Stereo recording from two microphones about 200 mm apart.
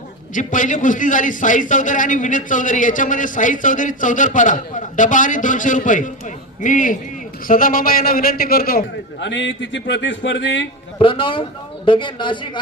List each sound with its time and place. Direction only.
0.3 s a man's voice: 40° left (ahead or behind)
9.2 s a man's voice: 65° left (ahead or behind)
10.9 s a woman's voice: 25° left (ahead or behind)